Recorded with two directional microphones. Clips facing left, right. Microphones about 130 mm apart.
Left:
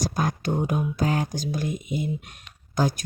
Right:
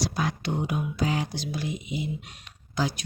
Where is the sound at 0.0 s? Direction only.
45° left (ahead or behind).